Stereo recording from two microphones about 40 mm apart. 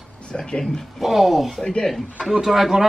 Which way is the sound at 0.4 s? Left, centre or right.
Centre.